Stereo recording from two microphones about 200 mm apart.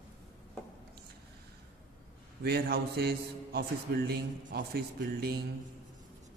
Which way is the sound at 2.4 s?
50° right (ahead or behind).